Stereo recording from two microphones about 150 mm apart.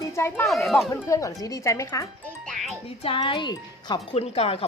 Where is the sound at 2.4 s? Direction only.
Centre (ahead or behind).